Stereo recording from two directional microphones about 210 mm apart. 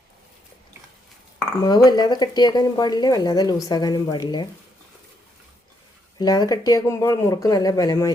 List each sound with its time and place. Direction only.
1.6 s a woman's voice: 20° left (ahead or behind)
6.1 s speech: 20° left (ahead or behind)